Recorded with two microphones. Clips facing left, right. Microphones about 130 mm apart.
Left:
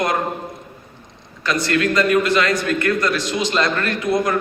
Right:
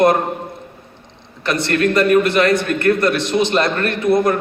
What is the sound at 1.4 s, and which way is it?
A man's voice, 60° right (ahead or behind).